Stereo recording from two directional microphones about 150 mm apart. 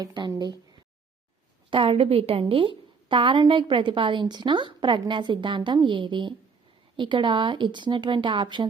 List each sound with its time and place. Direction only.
0.0 s speech: 25° right (ahead or behind)
1.7 s a woman's voice: 40° right (ahead or behind)